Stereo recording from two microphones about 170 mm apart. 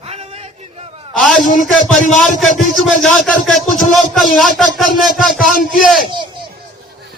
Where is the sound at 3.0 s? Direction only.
5° left (ahead or behind).